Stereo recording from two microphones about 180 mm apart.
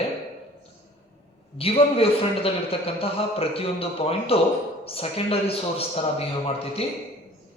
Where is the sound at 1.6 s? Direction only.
30° left (ahead or behind).